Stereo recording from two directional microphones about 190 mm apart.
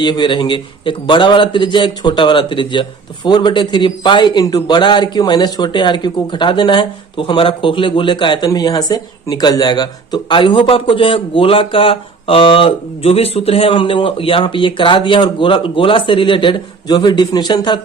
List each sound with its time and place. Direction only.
0.0 s a man's voice: 25° left (ahead or behind)